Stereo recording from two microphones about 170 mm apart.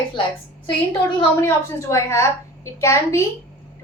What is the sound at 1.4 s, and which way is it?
A woman's voice, 15° left (ahead or behind).